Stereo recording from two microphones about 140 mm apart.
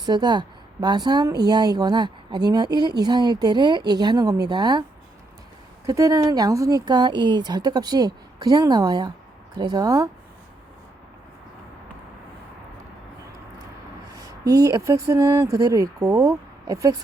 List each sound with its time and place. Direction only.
0.0 s speech: 30° right (ahead or behind)
14.2 s speech: 20° right (ahead or behind)